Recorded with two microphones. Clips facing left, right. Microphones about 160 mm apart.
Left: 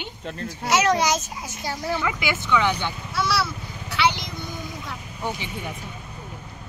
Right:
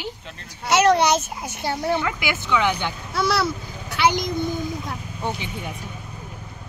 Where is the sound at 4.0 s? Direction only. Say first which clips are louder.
Right 3 dB; 45° right (ahead or behind).